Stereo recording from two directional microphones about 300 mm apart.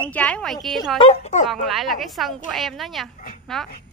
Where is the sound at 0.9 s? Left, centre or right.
Centre.